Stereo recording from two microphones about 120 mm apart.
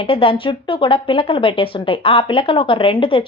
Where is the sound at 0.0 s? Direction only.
50° left (ahead or behind).